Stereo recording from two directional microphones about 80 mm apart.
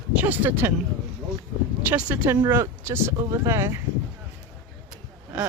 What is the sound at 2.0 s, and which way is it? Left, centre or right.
Speech, right.